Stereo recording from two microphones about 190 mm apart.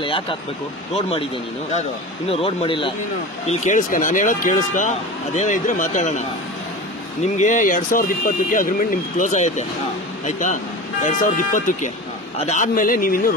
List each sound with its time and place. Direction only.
0.0 s speech: 25° left (ahead or behind)
3.4 s speech: 40° left (ahead or behind)
7.3 s speech: 40° left (ahead or behind)